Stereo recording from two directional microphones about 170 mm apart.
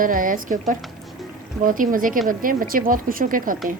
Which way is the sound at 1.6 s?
55° right (ahead or behind).